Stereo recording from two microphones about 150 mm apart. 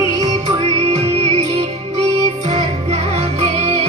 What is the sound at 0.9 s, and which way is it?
Music, 45° right (ahead or behind).